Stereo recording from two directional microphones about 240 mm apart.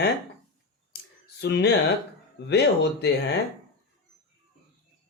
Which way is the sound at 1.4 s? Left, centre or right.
Left.